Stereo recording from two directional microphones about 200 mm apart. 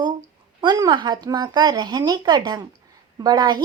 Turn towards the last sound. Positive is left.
turn(degrees=-20)  # may be behind; listen again after turning